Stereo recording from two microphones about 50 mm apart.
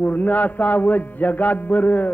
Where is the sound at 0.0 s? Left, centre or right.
Left.